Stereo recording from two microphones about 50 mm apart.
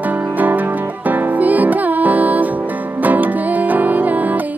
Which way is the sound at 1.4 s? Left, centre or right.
Right.